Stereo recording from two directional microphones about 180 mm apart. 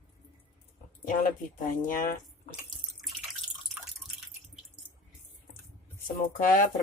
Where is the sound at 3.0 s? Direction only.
Centre (ahead or behind).